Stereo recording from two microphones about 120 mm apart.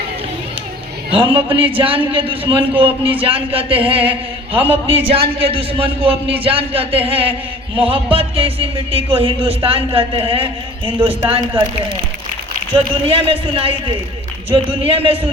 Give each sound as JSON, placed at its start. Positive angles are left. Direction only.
{"t": 1.1, "sound": "speech", "side_deg": -50}
{"t": 4.1, "sound": "a sound", "side_deg": -50}
{"t": 4.9, "sound": "speech", "side_deg": -50}
{"t": 12.7, "sound": "speech", "side_deg": -50}